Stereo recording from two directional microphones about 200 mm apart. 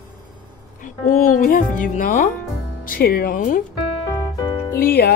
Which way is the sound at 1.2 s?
45° left (ahead or behind).